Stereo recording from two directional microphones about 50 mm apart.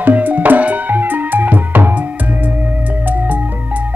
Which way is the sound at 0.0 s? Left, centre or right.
Right.